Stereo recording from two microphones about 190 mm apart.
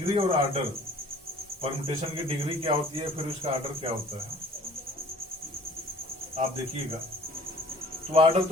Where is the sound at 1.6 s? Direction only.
30° right (ahead or behind).